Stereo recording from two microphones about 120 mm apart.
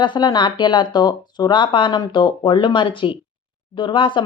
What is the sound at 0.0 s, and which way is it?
Speech, 40° left (ahead or behind).